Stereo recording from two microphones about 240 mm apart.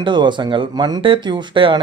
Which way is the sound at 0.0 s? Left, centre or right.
Centre.